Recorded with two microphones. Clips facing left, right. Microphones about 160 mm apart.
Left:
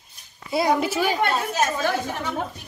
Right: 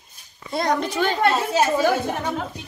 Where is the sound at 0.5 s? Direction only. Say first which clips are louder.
Left 1 dB; 5° left (ahead or behind).